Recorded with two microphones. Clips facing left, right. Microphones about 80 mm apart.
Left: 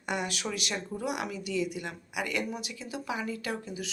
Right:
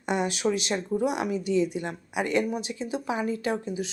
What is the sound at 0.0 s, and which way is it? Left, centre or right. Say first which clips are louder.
Speech: right 7 dB; right.